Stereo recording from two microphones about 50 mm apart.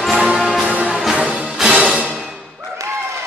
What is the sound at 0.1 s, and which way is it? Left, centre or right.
Music, centre.